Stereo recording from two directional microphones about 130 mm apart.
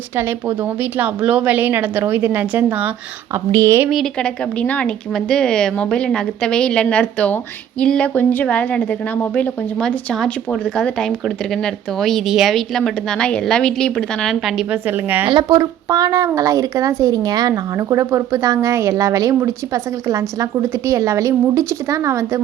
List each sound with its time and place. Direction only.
0.2 s a woman's voice: 15° right (ahead or behind)
3.3 s speech: 25° right (ahead or behind)
3.8 s a woman's voice: centre (ahead or behind)
14.7 s a woman's voice: 15° right (ahead or behind)
15.3 s speech: 35° right (ahead or behind)